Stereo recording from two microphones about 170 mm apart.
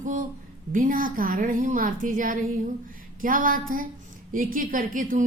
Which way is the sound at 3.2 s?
55° right (ahead or behind).